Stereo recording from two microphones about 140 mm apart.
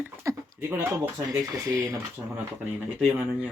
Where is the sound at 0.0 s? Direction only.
20° right (ahead or behind).